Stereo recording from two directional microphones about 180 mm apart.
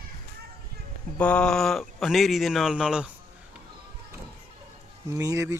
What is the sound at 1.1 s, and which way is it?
A man's voice, 5° left (ahead or behind).